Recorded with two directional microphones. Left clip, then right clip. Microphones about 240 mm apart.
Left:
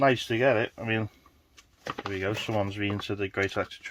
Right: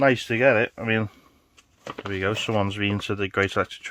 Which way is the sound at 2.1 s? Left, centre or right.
Right.